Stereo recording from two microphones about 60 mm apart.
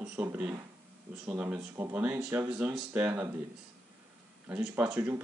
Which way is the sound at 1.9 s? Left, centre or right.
Right.